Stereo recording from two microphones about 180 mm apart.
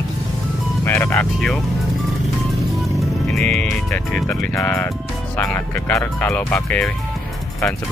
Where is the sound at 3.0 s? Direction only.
Centre (ahead or behind).